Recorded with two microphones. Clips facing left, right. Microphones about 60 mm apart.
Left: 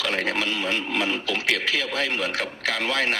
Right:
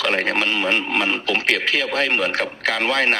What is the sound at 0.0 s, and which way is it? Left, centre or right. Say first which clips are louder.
Speech: right 5 dB; right.